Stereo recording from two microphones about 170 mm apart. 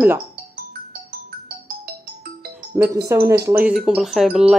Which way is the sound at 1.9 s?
65° right (ahead or behind).